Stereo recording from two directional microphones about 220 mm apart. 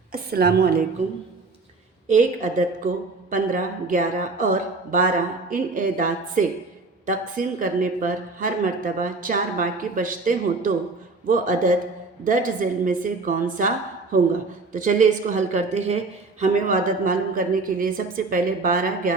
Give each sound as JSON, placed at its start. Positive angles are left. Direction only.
{"t": 0.1, "sound": "a woman's voice", "side_deg": -45}
{"t": 2.0, "sound": "a woman's voice", "side_deg": -35}
{"t": 14.7, "sound": "a woman's voice", "side_deg": -35}